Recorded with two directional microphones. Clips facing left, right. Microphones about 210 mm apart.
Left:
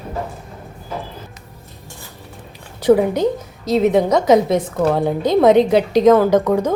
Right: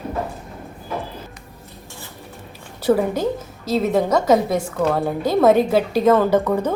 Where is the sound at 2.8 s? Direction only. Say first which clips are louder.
Left 4 dB; 15° left (ahead or behind).